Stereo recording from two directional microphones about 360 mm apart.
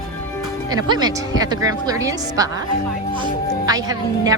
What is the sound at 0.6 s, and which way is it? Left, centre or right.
A woman's voice, centre.